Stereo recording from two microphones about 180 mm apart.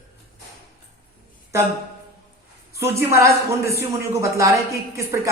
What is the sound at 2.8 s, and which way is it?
A woman's voice, 15° right (ahead or behind).